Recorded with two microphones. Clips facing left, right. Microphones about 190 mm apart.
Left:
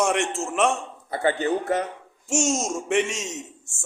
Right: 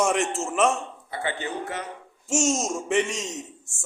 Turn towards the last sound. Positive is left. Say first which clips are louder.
# even
turn(degrees=0)  # may be behind; listen again after turning